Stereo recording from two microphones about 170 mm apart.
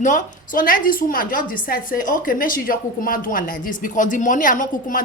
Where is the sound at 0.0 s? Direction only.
50° left (ahead or behind).